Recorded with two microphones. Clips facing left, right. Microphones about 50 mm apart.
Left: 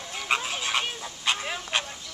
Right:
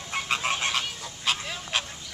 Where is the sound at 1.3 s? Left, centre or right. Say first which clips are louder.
Left 1 dB; centre.